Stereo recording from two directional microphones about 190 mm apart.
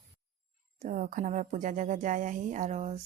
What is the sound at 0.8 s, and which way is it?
Speech, 45° right (ahead or behind).